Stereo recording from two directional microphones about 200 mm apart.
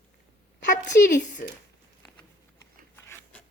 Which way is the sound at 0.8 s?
40° left (ahead or behind).